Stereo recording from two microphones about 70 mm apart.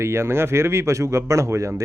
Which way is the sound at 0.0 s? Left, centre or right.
Right.